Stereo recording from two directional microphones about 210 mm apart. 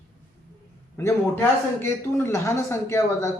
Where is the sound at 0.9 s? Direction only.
10° left (ahead or behind).